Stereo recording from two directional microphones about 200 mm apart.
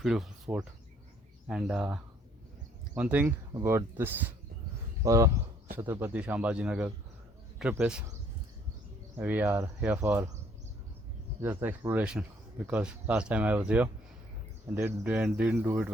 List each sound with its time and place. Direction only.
0.0 s speech: centre (ahead or behind)
9.1 s speech: 10° right (ahead or behind)
11.3 s speech: 10° right (ahead or behind)